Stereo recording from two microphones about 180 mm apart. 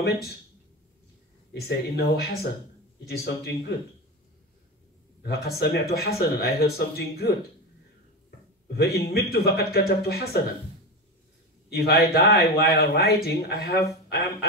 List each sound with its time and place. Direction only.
1.5 s speech: 65° left (ahead or behind)
5.2 s speech: 60° left (ahead or behind)
8.7 s speech: 60° left (ahead or behind)
11.7 s speech: 60° left (ahead or behind)